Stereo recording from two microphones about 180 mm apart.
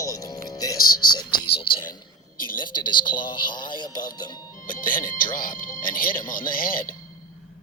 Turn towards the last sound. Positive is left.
turn(degrees=50)  # may be behind; listen again after turning